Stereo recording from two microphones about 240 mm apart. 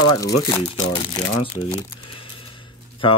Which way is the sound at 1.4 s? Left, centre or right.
Left.